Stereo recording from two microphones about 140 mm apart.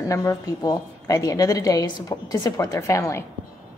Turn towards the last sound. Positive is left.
turn(degrees=20)  # may be behind; listen again after turning